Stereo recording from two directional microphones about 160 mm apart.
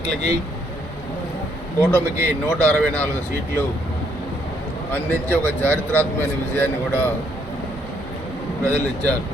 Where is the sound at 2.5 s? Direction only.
10° left (ahead or behind).